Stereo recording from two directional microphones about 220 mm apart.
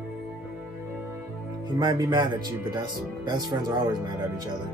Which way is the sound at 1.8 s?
20° right (ahead or behind).